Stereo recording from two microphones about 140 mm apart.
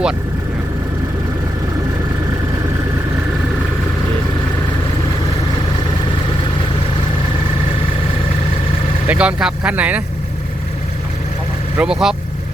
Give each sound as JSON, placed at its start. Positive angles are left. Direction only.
{"t": 9.0, "sound": "speech", "side_deg": -10}
{"t": 11.8, "sound": "speech", "side_deg": -5}